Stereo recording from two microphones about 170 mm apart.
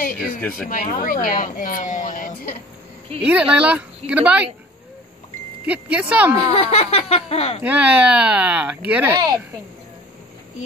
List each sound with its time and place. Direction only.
0.7 s speech: 55° left (ahead or behind)
3.2 s speech: 10° right (ahead or behind)
5.7 s speech: 10° right (ahead or behind)
6.5 s speech: 35° left (ahead or behind)
7.6 s speech: 10° right (ahead or behind)